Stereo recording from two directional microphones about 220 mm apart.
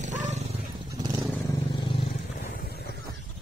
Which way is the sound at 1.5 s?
20° left (ahead or behind).